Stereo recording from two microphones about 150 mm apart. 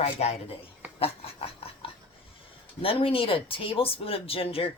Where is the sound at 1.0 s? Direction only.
40° left (ahead or behind).